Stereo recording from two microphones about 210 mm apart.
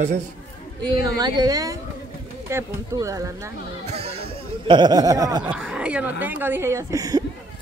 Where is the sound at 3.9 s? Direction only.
30° right (ahead or behind).